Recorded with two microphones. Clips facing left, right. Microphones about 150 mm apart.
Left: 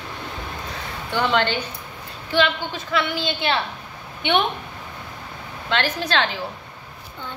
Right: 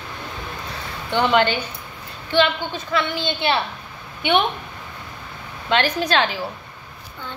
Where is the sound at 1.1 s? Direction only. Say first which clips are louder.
Right 3 dB; 20° right (ahead or behind).